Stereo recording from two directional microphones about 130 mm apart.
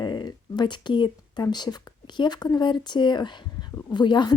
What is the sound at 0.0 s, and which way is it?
A woman's voice, 35° left (ahead or behind).